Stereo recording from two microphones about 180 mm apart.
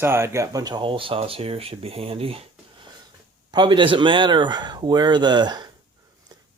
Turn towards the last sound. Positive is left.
turn(degrees=-25)  # may be behind; listen again after turning